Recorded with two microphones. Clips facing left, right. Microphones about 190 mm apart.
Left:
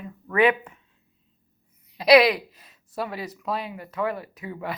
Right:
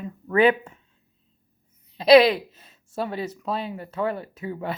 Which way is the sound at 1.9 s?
30° right (ahead or behind).